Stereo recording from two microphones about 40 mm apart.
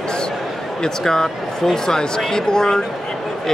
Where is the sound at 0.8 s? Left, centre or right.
Centre.